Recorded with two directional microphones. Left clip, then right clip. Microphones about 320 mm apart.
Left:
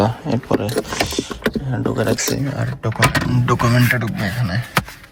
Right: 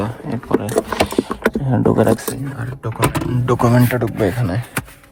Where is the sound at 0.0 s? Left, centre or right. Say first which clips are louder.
Left 5 dB; centre.